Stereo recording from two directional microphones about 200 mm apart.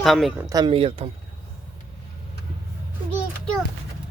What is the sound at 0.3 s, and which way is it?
Speech, 20° right (ahead or behind).